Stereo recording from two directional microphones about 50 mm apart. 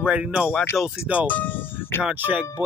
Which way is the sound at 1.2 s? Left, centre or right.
Left.